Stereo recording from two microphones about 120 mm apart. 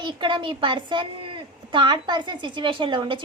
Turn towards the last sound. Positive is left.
turn(degrees=-40)  # may be behind; listen again after turning